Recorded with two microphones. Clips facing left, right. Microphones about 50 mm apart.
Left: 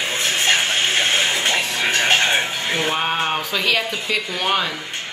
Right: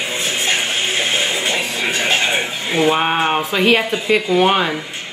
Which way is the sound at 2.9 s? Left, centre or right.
Centre.